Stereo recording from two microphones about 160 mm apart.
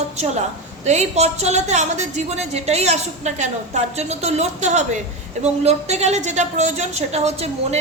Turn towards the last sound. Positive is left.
turn(degrees=-40)  # may be behind; listen again after turning